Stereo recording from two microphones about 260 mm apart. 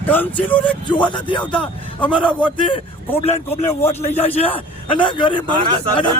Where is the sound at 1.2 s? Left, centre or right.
Centre.